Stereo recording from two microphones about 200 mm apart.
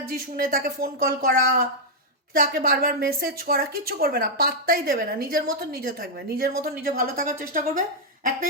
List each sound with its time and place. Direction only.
0.3 s a woman's voice: 45° right (ahead or behind)
2.3 s a woman's voice: 45° right (ahead or behind)